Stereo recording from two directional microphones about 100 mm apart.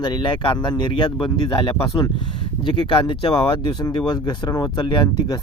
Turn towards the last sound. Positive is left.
turn(degrees=45)  # may be behind; listen again after turning